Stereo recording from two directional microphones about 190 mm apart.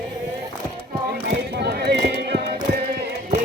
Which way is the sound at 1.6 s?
60° right (ahead or behind).